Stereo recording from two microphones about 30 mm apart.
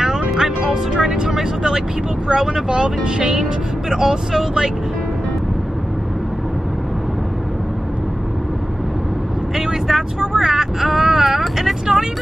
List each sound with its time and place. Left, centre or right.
0.7 s music: right
1.3 s speech: centre
9.6 s vehicle: centre